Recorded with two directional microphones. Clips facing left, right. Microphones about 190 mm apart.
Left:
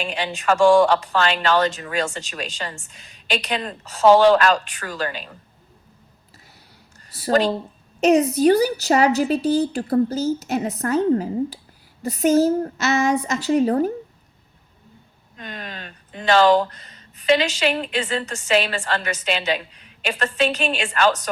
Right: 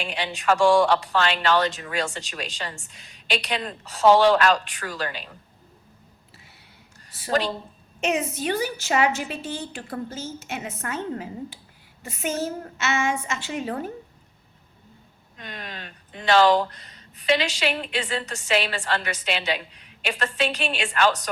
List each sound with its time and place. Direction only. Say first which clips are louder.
0.0 s speech: left 2 dB; 45° left (ahead or behind)
7.1 s a sound: left 6 dB; 40° left (ahead or behind)
8.0 s a woman's voice: left 10 dB; 40° left (ahead or behind)
15.4 s speech: left 3 dB; 45° left (ahead or behind)